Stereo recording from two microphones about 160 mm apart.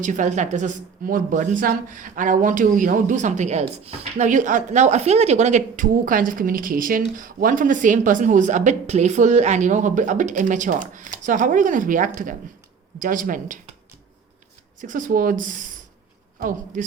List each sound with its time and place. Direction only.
0.0 s a woman's voice: 50° right (ahead or behind)
14.8 s speech: 55° right (ahead or behind)